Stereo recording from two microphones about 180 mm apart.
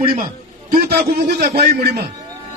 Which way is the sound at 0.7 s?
60° right (ahead or behind).